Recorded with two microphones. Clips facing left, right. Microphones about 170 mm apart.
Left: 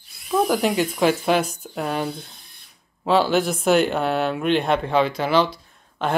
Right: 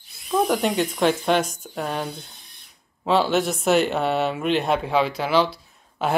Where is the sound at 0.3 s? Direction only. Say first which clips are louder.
Left 1 dB; centre (ahead or behind).